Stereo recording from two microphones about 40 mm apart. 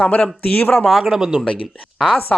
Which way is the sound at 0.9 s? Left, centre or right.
Centre.